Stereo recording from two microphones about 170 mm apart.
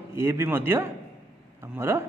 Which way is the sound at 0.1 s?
15° right (ahead or behind).